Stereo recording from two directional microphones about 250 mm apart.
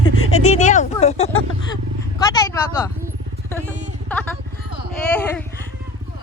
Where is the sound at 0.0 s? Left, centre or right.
Left.